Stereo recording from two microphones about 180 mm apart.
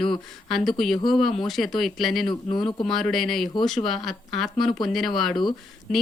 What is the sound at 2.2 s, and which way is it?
Speech, 25° left (ahead or behind).